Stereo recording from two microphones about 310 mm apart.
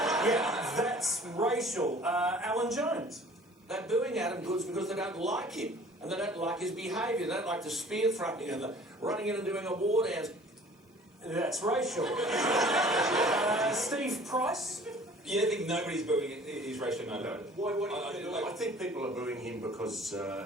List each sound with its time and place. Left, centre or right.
0.0 s a sound: centre
1.4 s speech: centre
9.7 s a man's voice: right
10.0 s speech: centre